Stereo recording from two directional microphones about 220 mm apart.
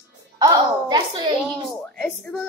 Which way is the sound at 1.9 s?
5° left (ahead or behind).